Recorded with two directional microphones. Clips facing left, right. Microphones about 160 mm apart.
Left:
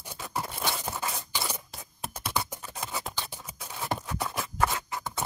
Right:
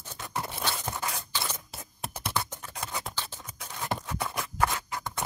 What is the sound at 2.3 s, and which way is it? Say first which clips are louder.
Scissors: left 1 dB; 10° left (ahead or behind).